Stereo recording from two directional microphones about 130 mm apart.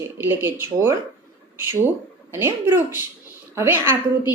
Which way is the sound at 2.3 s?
15° right (ahead or behind).